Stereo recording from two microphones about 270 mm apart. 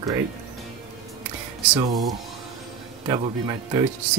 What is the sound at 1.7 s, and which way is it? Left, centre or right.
Speech, centre.